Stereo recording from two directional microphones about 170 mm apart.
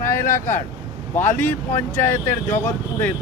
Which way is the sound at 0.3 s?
15° left (ahead or behind).